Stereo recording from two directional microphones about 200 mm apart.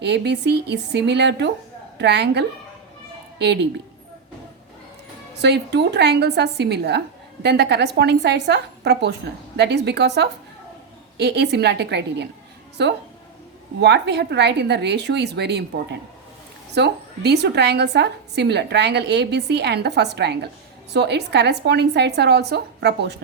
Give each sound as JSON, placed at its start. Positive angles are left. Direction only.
{"t": 0.0, "sound": "a woman's voice", "side_deg": -60}
{"t": 5.4, "sound": "a woman's voice", "side_deg": -60}
{"t": 16.7, "sound": "a woman's voice", "side_deg": -55}